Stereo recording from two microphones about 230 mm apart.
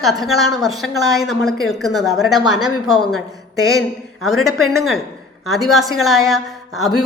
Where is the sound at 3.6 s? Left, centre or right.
Centre.